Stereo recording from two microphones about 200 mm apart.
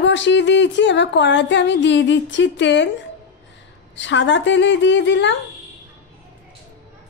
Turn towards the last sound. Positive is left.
turn(degrees=65)  # may be behind; listen again after turning